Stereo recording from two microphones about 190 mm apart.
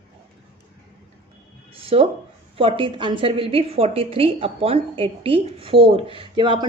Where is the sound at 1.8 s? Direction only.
30° right (ahead or behind).